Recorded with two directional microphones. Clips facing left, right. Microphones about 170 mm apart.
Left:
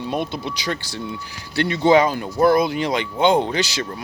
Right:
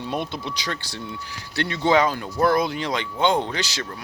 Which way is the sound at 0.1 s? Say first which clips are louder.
Left 3 dB; 5° left (ahead or behind).